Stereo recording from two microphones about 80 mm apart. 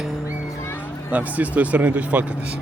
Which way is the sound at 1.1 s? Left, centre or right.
Centre.